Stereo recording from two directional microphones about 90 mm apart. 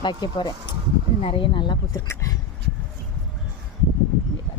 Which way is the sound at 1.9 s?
35° left (ahead or behind).